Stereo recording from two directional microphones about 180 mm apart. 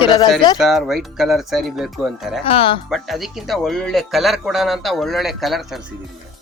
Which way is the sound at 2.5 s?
30° left (ahead or behind).